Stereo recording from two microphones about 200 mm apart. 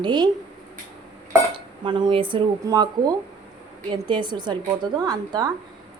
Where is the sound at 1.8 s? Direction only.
25° right (ahead or behind).